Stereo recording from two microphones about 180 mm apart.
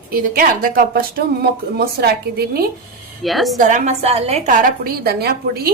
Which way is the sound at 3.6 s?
45° right (ahead or behind).